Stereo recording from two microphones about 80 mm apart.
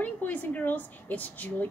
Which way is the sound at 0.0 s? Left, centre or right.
Left.